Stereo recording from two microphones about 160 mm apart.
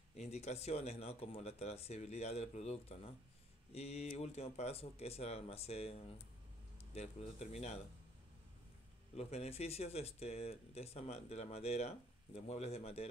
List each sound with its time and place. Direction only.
0.2 s speech: 45° left (ahead or behind)
9.1 s speech: 40° left (ahead or behind)